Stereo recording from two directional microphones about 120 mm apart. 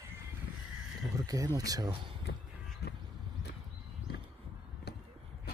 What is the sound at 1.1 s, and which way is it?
Speech, 30° right (ahead or behind).